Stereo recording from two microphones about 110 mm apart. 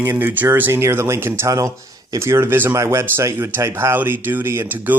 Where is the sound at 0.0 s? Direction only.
20° right (ahead or behind).